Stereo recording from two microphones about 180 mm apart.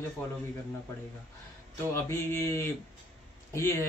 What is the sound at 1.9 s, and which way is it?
Speech, 15° left (ahead or behind).